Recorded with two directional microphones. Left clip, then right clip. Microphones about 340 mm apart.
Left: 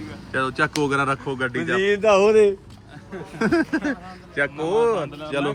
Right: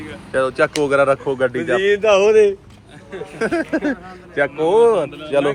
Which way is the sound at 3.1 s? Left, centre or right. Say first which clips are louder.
Right 1 dB; centre.